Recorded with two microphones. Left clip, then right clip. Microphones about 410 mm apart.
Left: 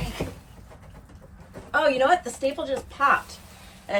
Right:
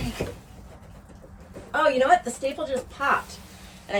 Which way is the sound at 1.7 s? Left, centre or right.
Centre.